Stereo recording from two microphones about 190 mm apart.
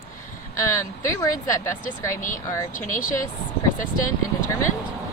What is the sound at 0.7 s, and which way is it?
Speech, 15° left (ahead or behind).